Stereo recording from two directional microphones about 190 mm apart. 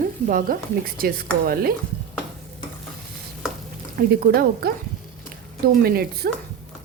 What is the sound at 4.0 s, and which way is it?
Speech, 50° right (ahead or behind).